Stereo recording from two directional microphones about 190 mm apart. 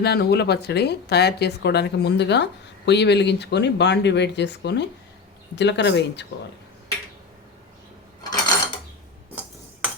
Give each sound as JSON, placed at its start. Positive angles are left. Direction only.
{"t": 0.0, "sound": "speech", "side_deg": 55}
{"t": 8.2, "sound": "pulleys", "side_deg": 20}